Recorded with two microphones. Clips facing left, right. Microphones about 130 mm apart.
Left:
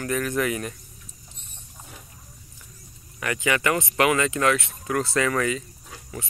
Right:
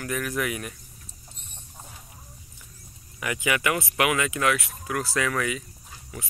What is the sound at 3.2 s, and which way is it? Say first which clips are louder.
Speech: left 2 dB; 10° right (ahead or behind).